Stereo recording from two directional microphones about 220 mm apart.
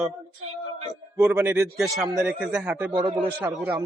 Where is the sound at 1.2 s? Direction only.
10° right (ahead or behind).